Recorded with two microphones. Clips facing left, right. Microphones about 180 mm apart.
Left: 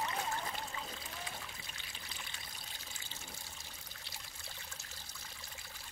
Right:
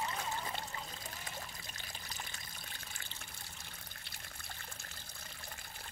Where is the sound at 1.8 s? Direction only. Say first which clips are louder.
Right 3 dB; 40° right (ahead or behind).